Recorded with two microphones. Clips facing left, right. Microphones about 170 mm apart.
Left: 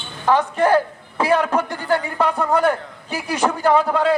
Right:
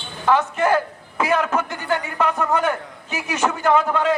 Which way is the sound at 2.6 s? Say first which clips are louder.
Left 4 dB; 35° left (ahead or behind).